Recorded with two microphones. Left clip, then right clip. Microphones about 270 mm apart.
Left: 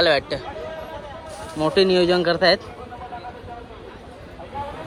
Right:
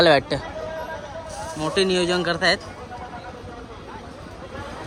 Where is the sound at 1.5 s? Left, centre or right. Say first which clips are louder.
Left 4 dB; centre.